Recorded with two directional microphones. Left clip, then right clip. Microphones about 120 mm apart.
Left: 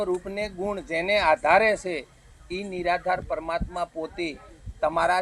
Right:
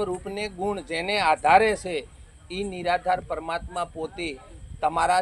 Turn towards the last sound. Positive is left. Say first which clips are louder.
# right 1 dB
turn(degrees=-35)  # may be behind; listen again after turning